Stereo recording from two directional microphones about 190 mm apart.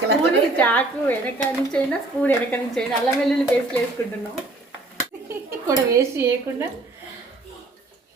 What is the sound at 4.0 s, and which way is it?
Speech, 15° left (ahead or behind).